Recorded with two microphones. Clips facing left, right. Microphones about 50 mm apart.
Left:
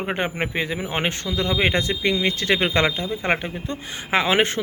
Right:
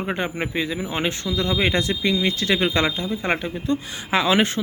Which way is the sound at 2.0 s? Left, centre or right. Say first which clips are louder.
Left 1 dB; left.